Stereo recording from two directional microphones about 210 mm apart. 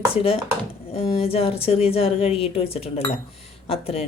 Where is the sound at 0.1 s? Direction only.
25° left (ahead or behind).